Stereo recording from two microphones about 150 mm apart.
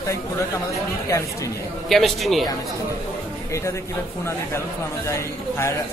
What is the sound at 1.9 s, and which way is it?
Speech, centre (ahead or behind).